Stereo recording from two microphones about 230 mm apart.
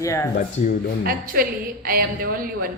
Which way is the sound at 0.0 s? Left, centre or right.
Centre.